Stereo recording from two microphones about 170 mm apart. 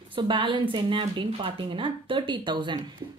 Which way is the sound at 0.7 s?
30° right (ahead or behind).